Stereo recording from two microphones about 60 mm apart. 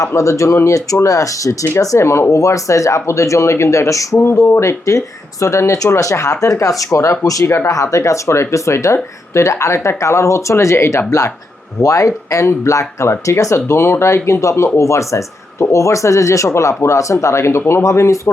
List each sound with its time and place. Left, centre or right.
0.0 s speech: left
4.2 s speech: left
7.4 s speech: left
7.7 s speech: left
11.8 s speech: left